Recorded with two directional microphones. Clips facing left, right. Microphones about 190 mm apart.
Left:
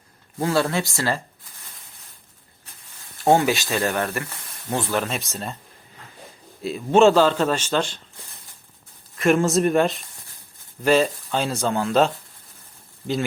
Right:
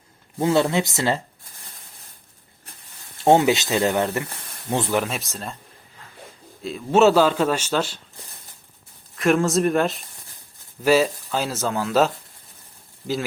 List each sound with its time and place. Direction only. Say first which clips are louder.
0.3 s speech: right 2 dB; 20° right (ahead or behind)
3.2 s a man's voice: right 2 dB; 20° right (ahead or behind); by 5.5 s centre (ahead or behind)
6.6 s a man's voice: left 1 dB; 5° left (ahead or behind)
9.1 s speech: left 1 dB; centre (ahead or behind)